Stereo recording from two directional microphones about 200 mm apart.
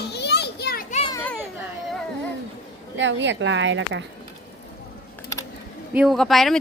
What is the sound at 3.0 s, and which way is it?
A woman's voice, 65° right (ahead or behind).